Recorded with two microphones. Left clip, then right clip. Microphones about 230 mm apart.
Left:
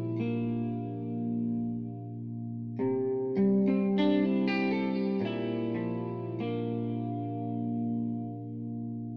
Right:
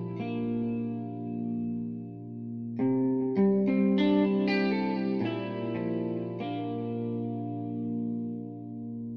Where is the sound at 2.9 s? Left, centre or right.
Right.